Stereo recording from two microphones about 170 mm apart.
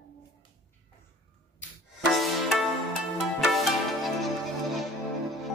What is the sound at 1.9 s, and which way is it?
Music, centre (ahead or behind).